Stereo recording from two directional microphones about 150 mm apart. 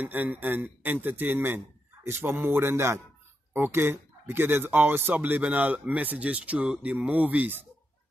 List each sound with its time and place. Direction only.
0.0 s speech: 10° right (ahead or behind)